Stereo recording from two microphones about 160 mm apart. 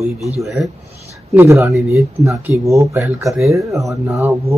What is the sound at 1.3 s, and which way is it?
Speech, 15° right (ahead or behind).